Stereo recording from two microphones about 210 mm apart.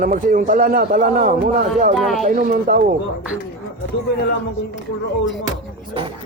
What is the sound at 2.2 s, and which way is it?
Speech, 40° right (ahead or behind).